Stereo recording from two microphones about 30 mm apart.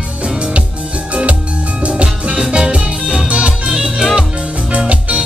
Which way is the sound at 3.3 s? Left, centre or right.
Right.